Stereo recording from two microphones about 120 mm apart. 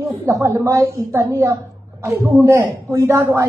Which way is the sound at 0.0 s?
25° right (ahead or behind).